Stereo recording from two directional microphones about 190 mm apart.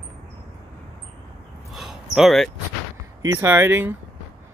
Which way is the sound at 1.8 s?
Centre (ahead or behind).